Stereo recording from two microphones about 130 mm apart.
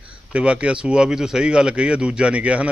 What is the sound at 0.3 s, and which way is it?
A man's voice, 10° right (ahead or behind).